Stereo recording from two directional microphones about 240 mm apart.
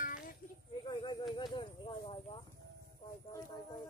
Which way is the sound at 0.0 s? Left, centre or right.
Left.